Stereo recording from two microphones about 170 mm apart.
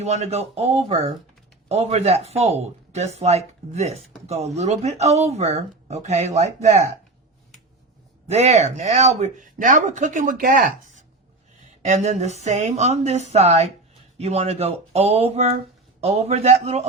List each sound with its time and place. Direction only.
0.0 s speech: 40° right (ahead or behind)
8.3 s speech: 40° right (ahead or behind)